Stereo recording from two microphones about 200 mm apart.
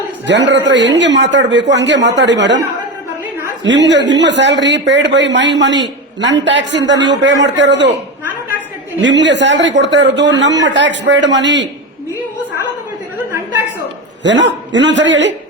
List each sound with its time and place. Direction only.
0.3 s speech: 60° right (ahead or behind)
3.6 s speech: 60° right (ahead or behind)
9.0 s speech: 65° right (ahead or behind)
14.3 s speech: 65° right (ahead or behind)